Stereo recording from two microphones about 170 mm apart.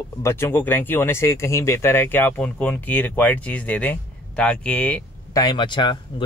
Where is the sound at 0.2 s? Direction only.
15° left (ahead or behind).